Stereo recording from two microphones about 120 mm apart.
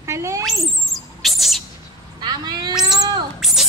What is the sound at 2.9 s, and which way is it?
Cat, 35° right (ahead or behind).